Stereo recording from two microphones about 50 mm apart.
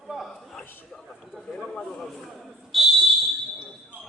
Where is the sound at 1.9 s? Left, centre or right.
Centre.